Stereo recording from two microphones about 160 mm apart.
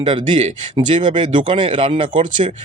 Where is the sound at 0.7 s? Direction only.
30° right (ahead or behind).